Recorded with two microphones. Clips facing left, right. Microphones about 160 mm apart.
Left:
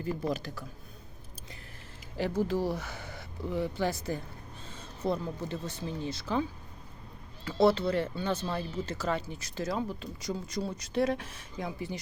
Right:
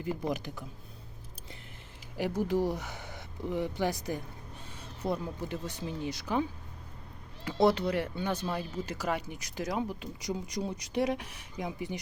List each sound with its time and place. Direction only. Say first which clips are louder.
0.0 s speech: left 1 dB; 15° right (ahead or behind)
2.1 s speech: even; 15° right (ahead or behind)
7.4 s speech: left 1 dB; 15° right (ahead or behind)